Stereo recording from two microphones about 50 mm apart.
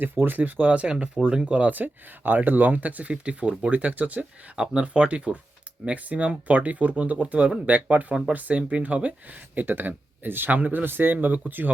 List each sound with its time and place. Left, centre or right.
0.0 s speech: right
9.6 s speech: right